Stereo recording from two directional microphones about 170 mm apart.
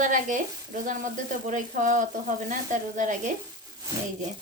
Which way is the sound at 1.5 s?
50° right (ahead or behind).